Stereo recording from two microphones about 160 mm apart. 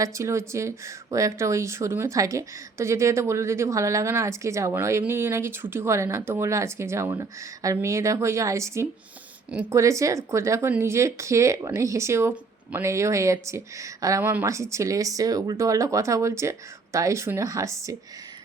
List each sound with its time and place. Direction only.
0.0 s speech: 20° right (ahead or behind)